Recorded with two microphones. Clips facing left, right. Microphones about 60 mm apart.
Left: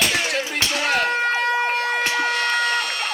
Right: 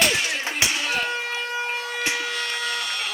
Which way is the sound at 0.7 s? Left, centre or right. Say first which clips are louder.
Left 5 dB; left.